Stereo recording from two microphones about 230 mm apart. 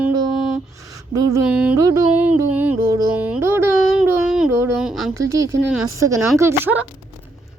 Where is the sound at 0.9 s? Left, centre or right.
Centre.